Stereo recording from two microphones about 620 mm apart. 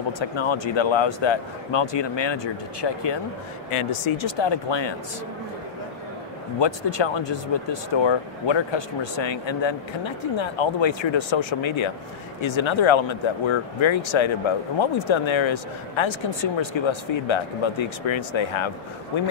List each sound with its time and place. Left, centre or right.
0.2 s speech: left
6.6 s speech: left